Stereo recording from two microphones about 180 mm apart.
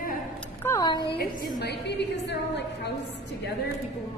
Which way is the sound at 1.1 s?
60° left (ahead or behind).